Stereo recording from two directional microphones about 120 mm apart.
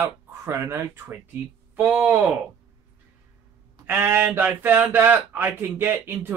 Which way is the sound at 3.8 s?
20° right (ahead or behind).